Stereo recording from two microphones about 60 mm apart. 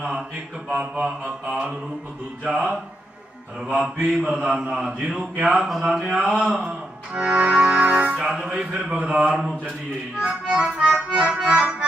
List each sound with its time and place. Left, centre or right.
0.0 s mantra: centre
0.7 s music: right
3.8 s mantra: centre
6.7 s music: centre
8.2 s mantra: centre
9.4 s mantra: centre
11.4 s accordion: centre